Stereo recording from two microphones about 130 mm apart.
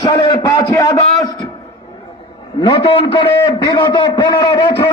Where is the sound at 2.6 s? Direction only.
40° left (ahead or behind).